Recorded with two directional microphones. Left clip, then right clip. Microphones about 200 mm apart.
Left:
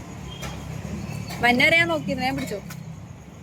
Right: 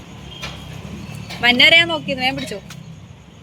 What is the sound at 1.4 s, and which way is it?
Speech, 20° right (ahead or behind).